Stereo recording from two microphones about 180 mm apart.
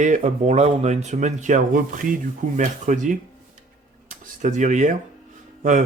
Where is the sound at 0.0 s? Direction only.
40° right (ahead or behind).